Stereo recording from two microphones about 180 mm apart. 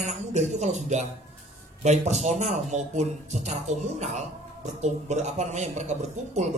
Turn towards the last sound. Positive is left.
turn(degrees=-40)  # may be behind; listen again after turning